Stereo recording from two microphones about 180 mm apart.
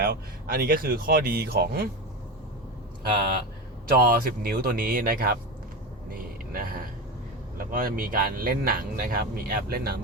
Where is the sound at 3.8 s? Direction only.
55° right (ahead or behind).